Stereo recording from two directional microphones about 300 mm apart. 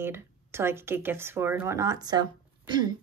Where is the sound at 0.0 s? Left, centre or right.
Centre.